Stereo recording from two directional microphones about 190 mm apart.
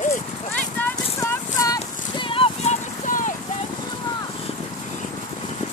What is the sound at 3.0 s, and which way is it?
Clip-clop, 45° left (ahead or behind).